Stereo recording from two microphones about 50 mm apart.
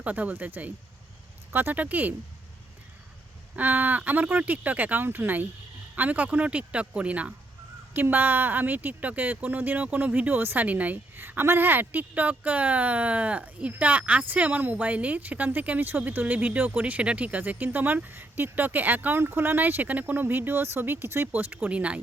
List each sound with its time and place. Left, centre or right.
0.0 s speech: right
3.5 s speech: right
7.9 s speech: right
11.2 s speech: right
21.3 s speech: right
21.7 s speech: right